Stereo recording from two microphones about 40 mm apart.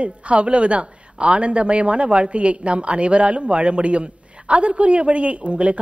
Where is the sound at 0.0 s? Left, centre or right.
Right.